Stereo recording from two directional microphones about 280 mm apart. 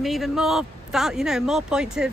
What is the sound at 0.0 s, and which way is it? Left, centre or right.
Speech, centre.